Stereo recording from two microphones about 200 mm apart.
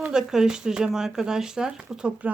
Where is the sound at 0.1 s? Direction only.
5° right (ahead or behind).